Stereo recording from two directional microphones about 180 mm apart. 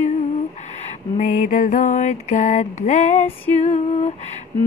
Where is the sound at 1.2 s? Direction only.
45° left (ahead or behind).